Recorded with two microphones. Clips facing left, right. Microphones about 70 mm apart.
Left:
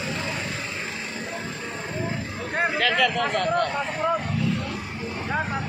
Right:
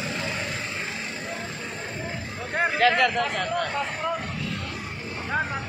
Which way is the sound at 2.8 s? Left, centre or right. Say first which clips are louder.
Right 3 dB; right.